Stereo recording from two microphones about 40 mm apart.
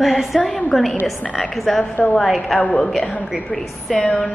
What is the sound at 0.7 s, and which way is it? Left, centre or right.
A woman's voice, centre.